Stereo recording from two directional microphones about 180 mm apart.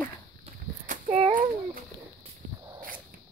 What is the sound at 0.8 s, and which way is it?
A child's voice, 40° right (ahead or behind).